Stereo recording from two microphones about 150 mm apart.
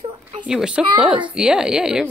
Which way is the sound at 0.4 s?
5° right (ahead or behind).